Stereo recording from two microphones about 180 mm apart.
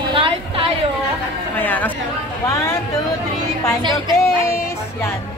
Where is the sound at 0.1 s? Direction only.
30° right (ahead or behind).